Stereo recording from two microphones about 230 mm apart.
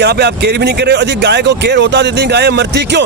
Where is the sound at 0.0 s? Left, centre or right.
Right.